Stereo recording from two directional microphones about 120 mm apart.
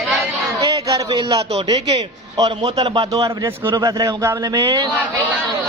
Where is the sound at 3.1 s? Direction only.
30° right (ahead or behind).